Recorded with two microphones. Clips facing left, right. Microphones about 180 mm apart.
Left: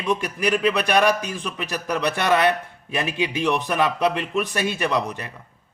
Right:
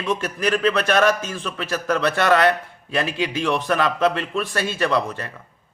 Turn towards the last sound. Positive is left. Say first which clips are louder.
# right 2 dB
turn(degrees=15)  # may be behind; listen again after turning